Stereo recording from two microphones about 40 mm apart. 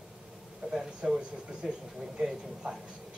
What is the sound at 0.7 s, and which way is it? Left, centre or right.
Speech, centre.